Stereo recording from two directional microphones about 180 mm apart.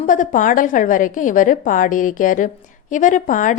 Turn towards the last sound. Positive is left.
turn(degrees=45)  # may be behind; listen again after turning